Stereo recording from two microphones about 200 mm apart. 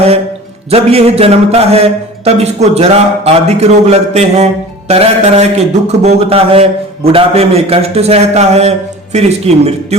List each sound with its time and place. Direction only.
0.7 s a man's voice: 30° right (ahead or behind)